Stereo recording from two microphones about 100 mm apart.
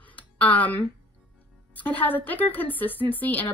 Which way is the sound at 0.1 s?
15° left (ahead or behind).